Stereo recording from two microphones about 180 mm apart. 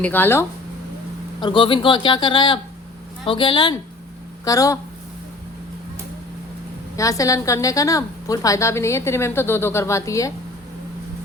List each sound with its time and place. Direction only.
0.0 s a woman's voice: 10° left (ahead or behind)
1.4 s a woman's voice: 25° left (ahead or behind)
6.9 s a woman's voice: 15° left (ahead or behind)